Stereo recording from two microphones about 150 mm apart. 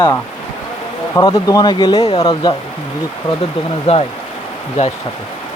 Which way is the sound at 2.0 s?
40° left (ahead or behind).